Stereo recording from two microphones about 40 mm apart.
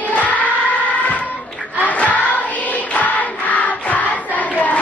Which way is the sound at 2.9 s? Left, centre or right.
Left.